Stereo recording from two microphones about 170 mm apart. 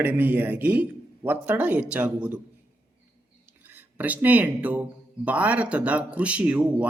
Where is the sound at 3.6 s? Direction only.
10° right (ahead or behind).